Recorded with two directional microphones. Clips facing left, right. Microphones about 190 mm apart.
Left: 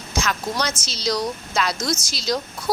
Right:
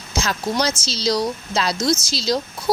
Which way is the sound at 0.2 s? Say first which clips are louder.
Right 3 dB; 30° right (ahead or behind).